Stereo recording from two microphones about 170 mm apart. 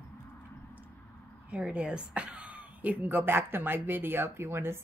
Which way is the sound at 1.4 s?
5° right (ahead or behind).